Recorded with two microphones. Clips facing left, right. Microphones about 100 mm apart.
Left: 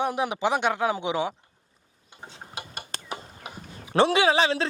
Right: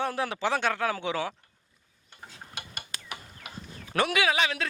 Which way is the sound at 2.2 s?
30° left (ahead or behind).